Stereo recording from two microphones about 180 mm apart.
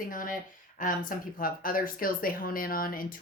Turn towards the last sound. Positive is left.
turn(degrees=50)  # may be behind; listen again after turning